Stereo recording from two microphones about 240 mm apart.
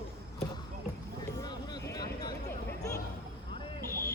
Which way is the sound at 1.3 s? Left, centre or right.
Centre.